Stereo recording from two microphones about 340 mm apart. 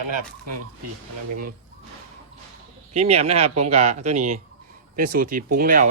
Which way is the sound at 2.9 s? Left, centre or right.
Centre.